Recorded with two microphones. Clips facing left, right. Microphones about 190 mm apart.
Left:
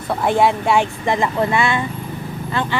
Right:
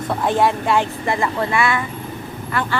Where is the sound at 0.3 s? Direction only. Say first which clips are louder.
Left 2 dB; 15° left (ahead or behind).